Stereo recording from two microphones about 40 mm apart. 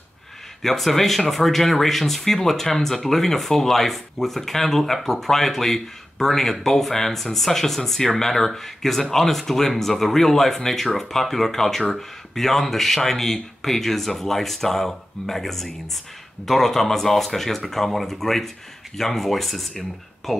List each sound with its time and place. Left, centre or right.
0.6 s speech: centre